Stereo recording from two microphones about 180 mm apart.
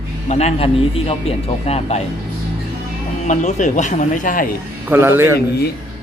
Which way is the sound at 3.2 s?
40° left (ahead or behind).